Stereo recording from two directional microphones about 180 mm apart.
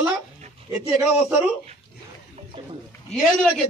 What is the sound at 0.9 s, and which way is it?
Speech, 5° right (ahead or behind).